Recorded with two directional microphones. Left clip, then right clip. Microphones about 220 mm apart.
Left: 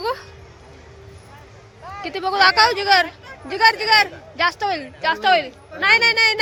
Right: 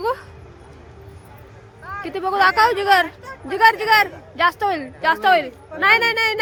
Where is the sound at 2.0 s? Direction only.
15° right (ahead or behind).